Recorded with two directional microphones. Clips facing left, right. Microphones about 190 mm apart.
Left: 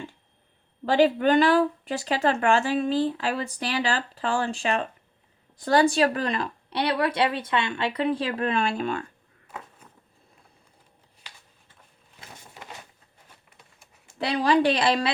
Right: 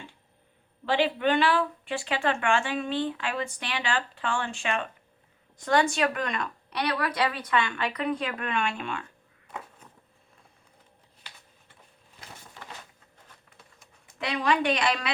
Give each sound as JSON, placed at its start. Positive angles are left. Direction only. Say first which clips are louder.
{"t": 0.9, "sound": "speech", "louder": "left 5 dB", "side_deg": 40}
{"t": 9.5, "sound": "a sound", "louder": "even", "side_deg": 5}
{"t": 14.1, "sound": "speech", "louder": "left 4 dB", "side_deg": 35}